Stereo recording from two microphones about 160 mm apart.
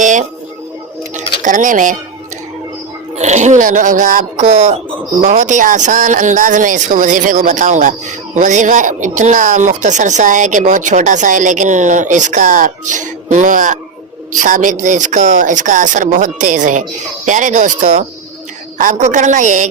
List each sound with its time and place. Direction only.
0.0 s a sound: 50° right (ahead or behind)
1.4 s speech: 55° right (ahead or behind)
3.2 s speech: 45° right (ahead or behind)